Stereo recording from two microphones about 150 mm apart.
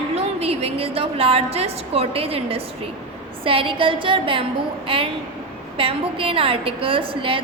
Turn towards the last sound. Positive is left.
turn(degrees=-35)  # may be behind; listen again after turning